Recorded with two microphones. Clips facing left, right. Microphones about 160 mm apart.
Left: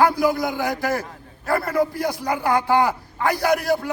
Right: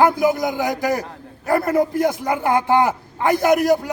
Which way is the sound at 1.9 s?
50° right (ahead or behind).